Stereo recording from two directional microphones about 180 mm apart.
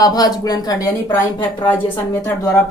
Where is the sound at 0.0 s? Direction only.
20° left (ahead or behind).